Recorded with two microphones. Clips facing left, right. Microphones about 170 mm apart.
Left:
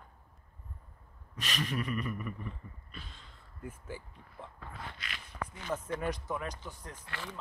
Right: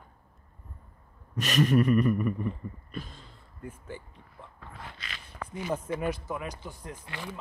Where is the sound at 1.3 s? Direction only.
45° right (ahead or behind).